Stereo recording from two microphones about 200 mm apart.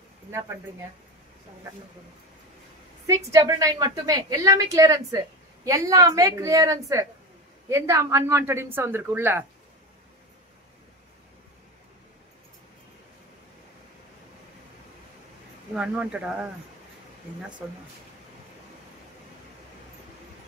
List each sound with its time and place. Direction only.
3.1 s a woman's voice: 15° right (ahead or behind)
15.7 s speech: 5° right (ahead or behind)